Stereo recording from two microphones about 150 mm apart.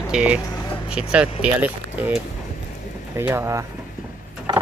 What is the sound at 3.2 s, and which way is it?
Speech, 15° right (ahead or behind).